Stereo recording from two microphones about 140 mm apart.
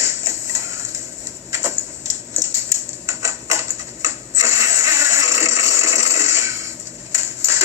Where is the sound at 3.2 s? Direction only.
20° right (ahead or behind).